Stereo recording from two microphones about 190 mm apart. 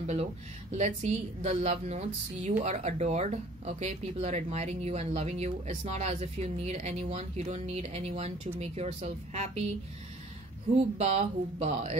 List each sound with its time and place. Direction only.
0.0 s a woman's voice: 35° right (ahead or behind)
11.0 s a woman's voice: 35° right (ahead or behind)